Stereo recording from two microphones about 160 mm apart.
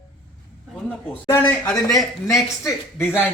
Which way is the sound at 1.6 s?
Centre (ahead or behind).